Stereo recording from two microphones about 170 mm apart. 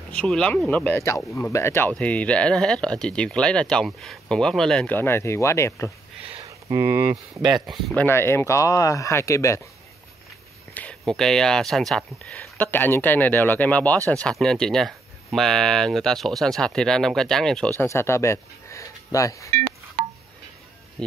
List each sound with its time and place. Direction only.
0.1 s speech: 5° left (ahead or behind)
6.2 s a sound: 35° right (ahead or behind)
6.7 s speech: 20° right (ahead or behind)
7.5 s speech: centre (ahead or behind); by 9.6 s 15° left (ahead or behind)
10.7 s speech: 10° left (ahead or behind)
17.7 s speech: 15° left (ahead or behind)
19.5 s music: 55° right (ahead or behind)